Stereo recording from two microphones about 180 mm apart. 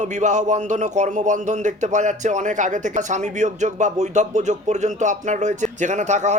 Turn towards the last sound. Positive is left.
turn(degrees=-40)  # may be behind; listen again after turning